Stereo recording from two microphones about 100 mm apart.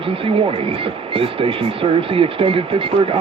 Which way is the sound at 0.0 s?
65° right (ahead or behind).